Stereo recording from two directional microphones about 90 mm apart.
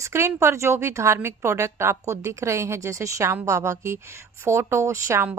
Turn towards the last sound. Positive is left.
turn(degrees=-30)  # may be behind; listen again after turning